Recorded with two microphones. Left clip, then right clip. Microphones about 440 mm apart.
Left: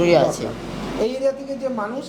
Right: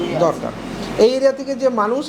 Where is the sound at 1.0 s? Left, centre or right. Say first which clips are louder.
Right 8 dB; right.